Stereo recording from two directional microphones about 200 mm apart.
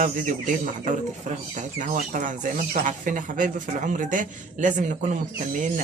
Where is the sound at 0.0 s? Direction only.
40° right (ahead or behind).